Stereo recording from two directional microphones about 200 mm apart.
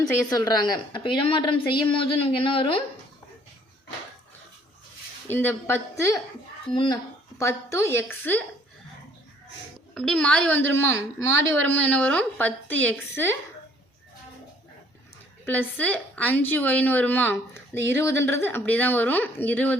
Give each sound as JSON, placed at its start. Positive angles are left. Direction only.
{"t": 0.0, "sound": "a woman's voice", "side_deg": 20}
{"t": 5.3, "sound": "a woman's voice", "side_deg": 10}
{"t": 9.9, "sound": "a woman's voice", "side_deg": 0}
{"t": 15.4, "sound": "a woman's voice", "side_deg": 10}